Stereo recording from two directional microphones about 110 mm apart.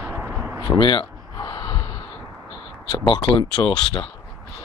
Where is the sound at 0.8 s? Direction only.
45° left (ahead or behind).